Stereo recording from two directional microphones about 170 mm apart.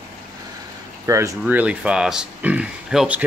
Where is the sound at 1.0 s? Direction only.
20° right (ahead or behind).